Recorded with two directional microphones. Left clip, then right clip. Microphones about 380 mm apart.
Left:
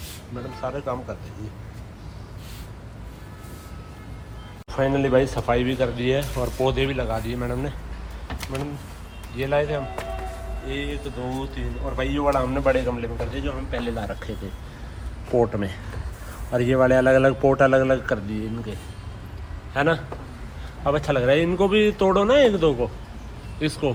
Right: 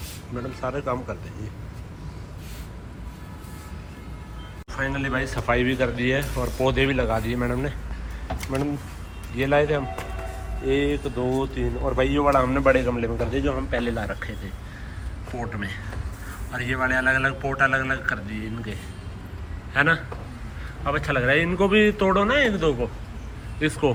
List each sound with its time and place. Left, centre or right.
0.3 s speech: centre
4.7 s speech: centre
16.8 s speech: centre